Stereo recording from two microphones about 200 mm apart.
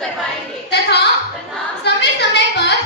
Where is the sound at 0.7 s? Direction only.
60° left (ahead or behind).